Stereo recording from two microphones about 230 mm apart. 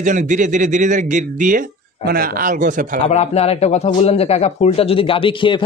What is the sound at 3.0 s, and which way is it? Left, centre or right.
A man's voice, left.